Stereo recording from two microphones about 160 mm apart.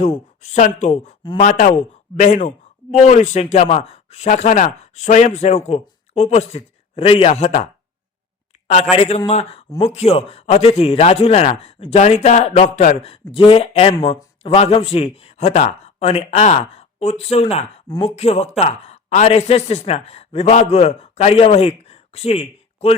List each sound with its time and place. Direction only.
0.0 s speech: 45° left (ahead or behind)
1.2 s a man's voice: 30° left (ahead or behind)
1.5 s a man's voice: 50° left (ahead or behind)
17.8 s speech: 25° left (ahead or behind)
18.2 s speech: 40° left (ahead or behind)